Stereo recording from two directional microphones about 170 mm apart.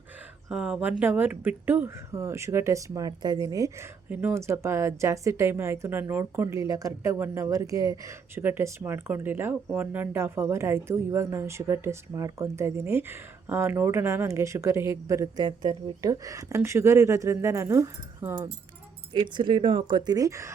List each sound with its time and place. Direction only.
0.4 s speech: 5° right (ahead or behind)
19.1 s speech: 30° right (ahead or behind)